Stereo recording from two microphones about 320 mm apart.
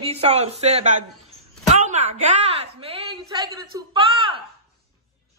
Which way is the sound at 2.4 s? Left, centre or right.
Centre.